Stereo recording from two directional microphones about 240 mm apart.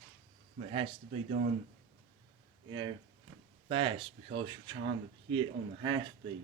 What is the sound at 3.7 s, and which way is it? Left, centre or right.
Speech, right.